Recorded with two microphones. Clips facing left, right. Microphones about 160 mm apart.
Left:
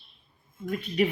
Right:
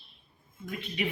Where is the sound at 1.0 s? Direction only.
45° left (ahead or behind).